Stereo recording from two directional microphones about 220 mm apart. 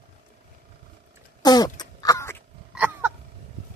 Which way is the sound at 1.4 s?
15° left (ahead or behind).